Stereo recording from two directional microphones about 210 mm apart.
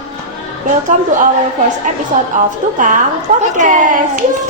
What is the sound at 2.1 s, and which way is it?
Speech, 40° right (ahead or behind).